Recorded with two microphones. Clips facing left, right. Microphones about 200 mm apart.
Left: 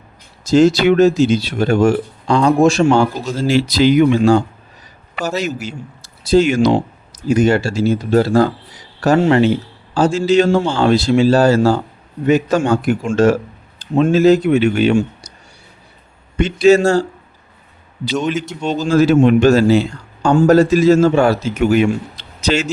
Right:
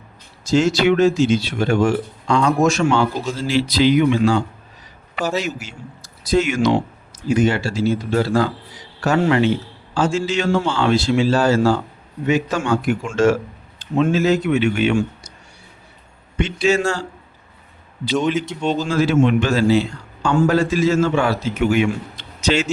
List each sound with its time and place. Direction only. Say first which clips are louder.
0.4 s a man's voice: left 5 dB; 40° left (ahead or behind)
5.3 s a man's voice: left 3 dB; 40° left (ahead or behind)
16.4 s speech: left 7 dB; 40° left (ahead or behind)
18.3 s a man's voice: even; 45° left (ahead or behind)
18.6 s speech: left 1 dB; 5° left (ahead or behind)
18.9 s a man's voice: left 7 dB; 40° left (ahead or behind)